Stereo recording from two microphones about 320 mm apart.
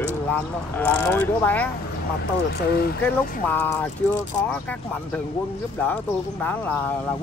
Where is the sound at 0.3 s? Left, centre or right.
Centre.